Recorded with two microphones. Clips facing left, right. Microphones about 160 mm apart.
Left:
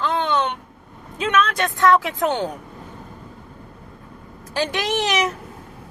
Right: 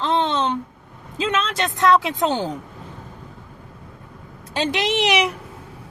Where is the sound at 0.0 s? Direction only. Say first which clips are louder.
Right 1 dB; 25° right (ahead or behind).